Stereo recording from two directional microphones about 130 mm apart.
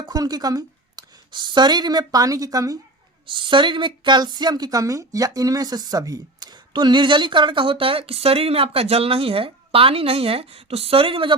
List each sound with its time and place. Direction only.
0.0 s speech: 30° right (ahead or behind)
3.2 s a woman's voice: 40° right (ahead or behind)